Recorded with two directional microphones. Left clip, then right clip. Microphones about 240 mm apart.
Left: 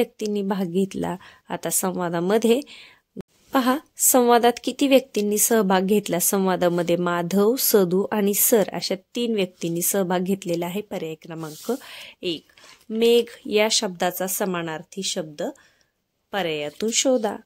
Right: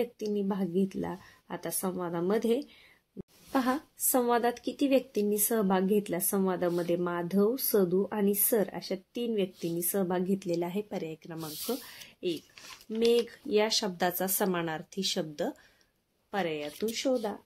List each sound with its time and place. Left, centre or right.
0.0 s a woman's voice: left
16.3 s speech: left